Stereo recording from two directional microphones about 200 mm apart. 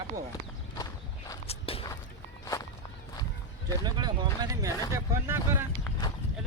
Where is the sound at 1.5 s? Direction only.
30° left (ahead or behind).